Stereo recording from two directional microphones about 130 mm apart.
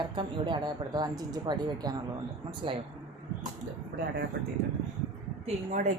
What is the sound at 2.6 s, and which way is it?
Speech, 40° right (ahead or behind).